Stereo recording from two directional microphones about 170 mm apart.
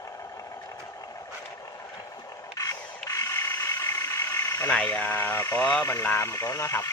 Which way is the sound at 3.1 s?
15° left (ahead or behind).